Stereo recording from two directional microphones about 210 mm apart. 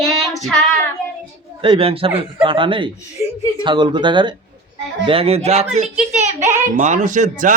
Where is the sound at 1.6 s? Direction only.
25° right (ahead or behind).